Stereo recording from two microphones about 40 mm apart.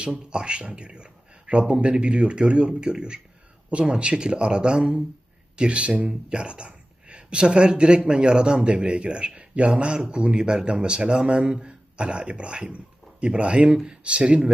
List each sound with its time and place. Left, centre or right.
0.0 s speech: right